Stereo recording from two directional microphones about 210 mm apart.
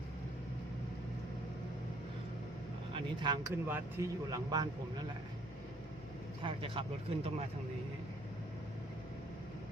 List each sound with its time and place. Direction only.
2.9 s speech: 20° right (ahead or behind)
6.4 s speech: 25° right (ahead or behind)